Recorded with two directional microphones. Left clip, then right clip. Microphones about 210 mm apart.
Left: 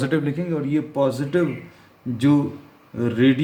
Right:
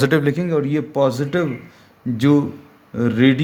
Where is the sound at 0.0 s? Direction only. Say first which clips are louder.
Right 6 dB; 50° right (ahead or behind).